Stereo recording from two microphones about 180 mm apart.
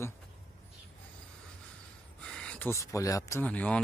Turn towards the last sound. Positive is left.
turn(degrees=5)  # may be behind; listen again after turning